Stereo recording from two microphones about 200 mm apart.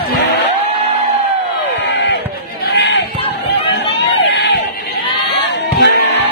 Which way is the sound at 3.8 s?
60° left (ahead or behind).